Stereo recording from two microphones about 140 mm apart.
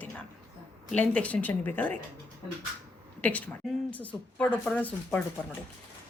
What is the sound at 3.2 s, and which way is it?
Speech, 10° left (ahead or behind).